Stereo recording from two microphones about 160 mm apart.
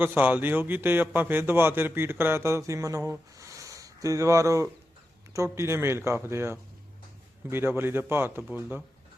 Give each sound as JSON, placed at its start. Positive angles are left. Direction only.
{"t": 0.0, "sound": "speech", "side_deg": -10}